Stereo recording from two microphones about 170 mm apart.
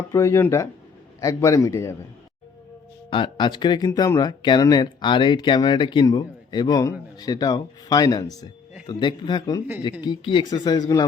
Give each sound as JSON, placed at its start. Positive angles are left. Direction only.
{"t": 0.1, "sound": "speech", "side_deg": 15}
{"t": 3.1, "sound": "speech", "side_deg": 30}